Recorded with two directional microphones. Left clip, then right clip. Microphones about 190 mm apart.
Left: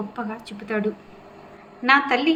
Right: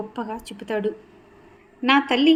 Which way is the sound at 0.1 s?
55° right (ahead or behind).